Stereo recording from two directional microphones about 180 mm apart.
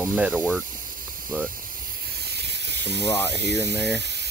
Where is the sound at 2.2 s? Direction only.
65° right (ahead or behind).